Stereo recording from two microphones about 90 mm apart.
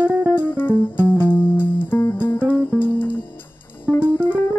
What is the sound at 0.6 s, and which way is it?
Music, 20° left (ahead or behind).